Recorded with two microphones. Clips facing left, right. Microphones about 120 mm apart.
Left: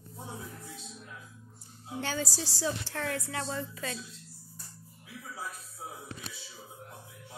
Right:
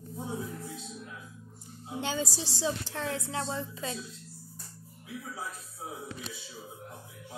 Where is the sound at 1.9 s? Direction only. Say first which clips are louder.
Right 1 dB; 20° right (ahead or behind).